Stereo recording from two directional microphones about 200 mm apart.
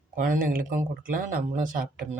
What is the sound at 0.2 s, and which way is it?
Speech, 45° right (ahead or behind).